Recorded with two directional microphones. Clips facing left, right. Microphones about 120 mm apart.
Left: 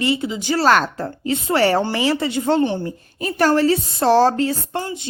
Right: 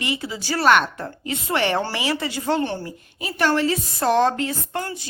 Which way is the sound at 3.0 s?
40° left (ahead or behind).